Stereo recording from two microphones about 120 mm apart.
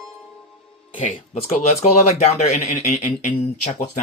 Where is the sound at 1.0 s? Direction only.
80° left.